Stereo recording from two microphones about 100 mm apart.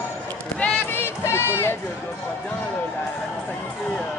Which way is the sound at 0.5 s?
20° left (ahead or behind).